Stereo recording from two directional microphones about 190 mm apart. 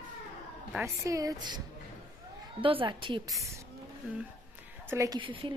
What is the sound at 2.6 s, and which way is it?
Speech, 25° right (ahead or behind).